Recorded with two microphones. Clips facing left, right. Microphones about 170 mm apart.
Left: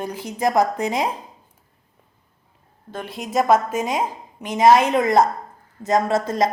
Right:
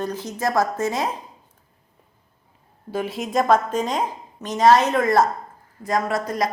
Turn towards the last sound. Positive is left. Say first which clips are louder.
# left 3 dB
turn(degrees=25)  # may be behind; listen again after turning